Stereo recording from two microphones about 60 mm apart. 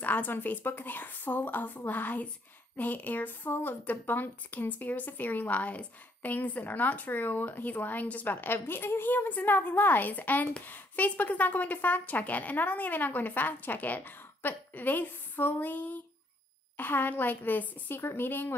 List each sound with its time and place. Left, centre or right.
0.0 s a woman's voice: left